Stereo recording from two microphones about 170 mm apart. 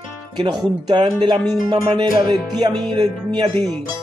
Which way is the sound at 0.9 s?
25° right (ahead or behind).